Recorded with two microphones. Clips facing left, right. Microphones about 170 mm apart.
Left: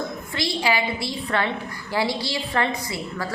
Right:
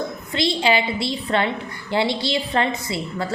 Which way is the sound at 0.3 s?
25° right (ahead or behind).